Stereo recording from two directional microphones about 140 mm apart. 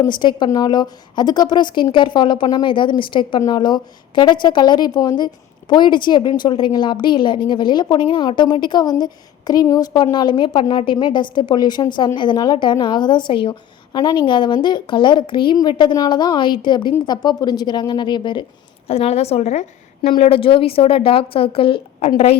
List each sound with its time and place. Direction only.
0.0 s a woman's voice: 30° left (ahead or behind)